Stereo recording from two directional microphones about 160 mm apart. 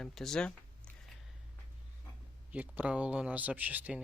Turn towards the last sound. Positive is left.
turn(degrees=-10)  # may be behind; listen again after turning